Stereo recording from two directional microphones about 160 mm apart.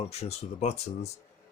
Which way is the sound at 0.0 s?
40° left (ahead or behind).